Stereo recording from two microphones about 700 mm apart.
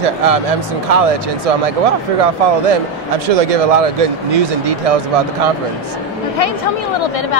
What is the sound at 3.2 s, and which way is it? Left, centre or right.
A man's voice, right.